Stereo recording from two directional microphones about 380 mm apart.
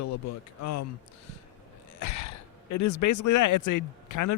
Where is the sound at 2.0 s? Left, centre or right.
Left.